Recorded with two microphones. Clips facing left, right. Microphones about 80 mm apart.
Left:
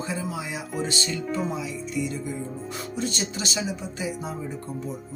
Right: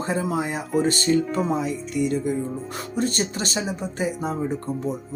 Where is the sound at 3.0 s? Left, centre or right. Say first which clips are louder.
Right 6 dB; right.